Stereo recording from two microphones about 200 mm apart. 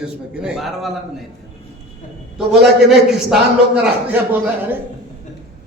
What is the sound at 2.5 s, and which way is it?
A man's voice, centre (ahead or behind).